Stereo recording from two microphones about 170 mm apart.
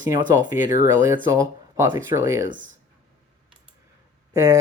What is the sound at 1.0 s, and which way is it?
Speech, 15° right (ahead or behind).